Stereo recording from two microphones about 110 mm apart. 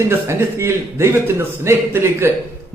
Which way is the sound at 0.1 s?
20° right (ahead or behind).